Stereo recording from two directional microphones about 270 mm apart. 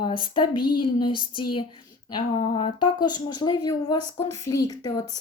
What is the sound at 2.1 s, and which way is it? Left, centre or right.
Speech, centre.